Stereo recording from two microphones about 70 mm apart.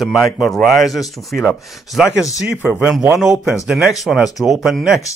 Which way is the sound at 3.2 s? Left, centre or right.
Centre.